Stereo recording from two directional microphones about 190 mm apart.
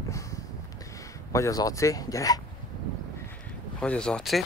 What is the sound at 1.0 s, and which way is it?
Speech, 15° left (ahead or behind).